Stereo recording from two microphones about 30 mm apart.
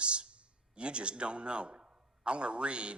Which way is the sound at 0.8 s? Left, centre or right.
Right.